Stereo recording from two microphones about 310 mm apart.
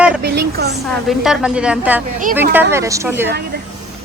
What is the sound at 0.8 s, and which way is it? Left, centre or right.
Speech, centre.